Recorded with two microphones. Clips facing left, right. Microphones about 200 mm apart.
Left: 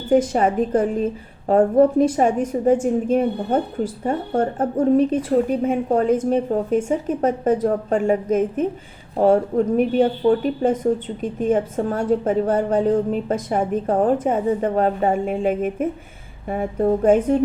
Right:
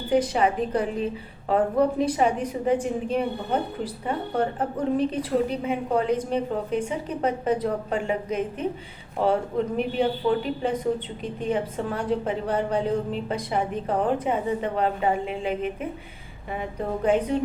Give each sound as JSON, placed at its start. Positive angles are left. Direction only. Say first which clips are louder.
{"t": 0.1, "sound": "a woman's voice", "louder": "left 5 dB", "side_deg": 45}